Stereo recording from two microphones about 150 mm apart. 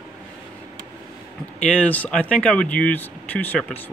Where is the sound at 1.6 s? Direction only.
10° left (ahead or behind).